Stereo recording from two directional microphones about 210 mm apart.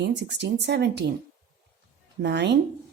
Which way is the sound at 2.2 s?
55° right (ahead or behind).